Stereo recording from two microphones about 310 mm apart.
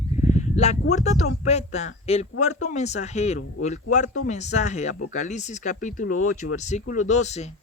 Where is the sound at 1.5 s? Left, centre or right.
Left.